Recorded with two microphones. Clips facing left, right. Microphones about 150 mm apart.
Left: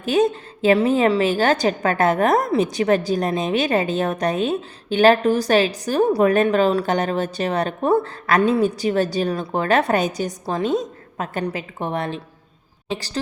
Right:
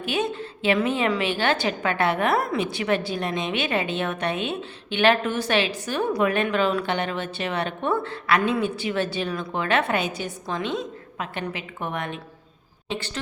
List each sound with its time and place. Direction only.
0.0 s a woman's voice: 40° left (ahead or behind)